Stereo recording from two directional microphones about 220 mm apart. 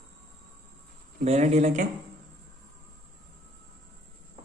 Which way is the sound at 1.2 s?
30° right (ahead or behind).